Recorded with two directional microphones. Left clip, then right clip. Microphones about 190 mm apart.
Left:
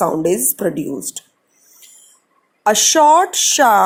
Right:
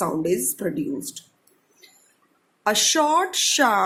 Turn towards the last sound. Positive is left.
turn(degrees=25)  # may be behind; listen again after turning